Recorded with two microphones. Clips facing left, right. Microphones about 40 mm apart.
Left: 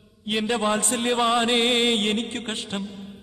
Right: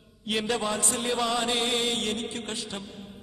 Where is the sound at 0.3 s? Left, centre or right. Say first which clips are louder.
Left 3 dB; centre.